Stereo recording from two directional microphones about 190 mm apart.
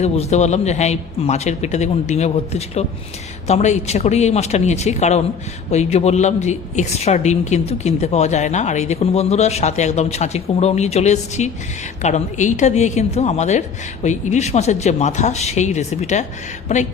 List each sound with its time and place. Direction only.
0.0 s a woman's voice: 35° left (ahead or behind)